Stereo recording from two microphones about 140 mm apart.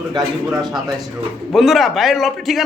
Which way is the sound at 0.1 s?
30° right (ahead or behind).